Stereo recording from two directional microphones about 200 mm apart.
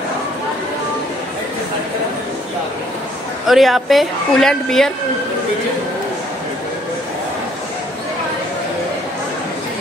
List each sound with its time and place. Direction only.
3.4 s a woman's voice: centre (ahead or behind)